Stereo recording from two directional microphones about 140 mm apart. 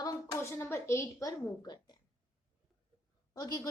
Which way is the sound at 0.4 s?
15° left (ahead or behind).